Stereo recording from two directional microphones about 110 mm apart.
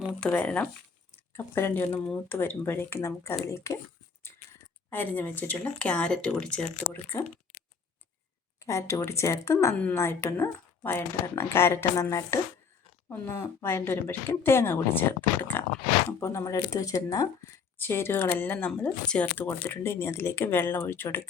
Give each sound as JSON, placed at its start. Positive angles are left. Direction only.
{"t": 0.2, "sound": "speech", "side_deg": 15}
{"t": 4.9, "sound": "speech", "side_deg": 15}
{"t": 6.9, "sound": "speech", "side_deg": 20}
{"t": 8.6, "sound": "speech", "side_deg": 30}